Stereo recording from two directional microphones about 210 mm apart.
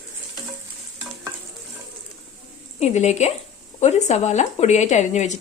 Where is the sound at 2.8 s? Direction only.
30° left (ahead or behind).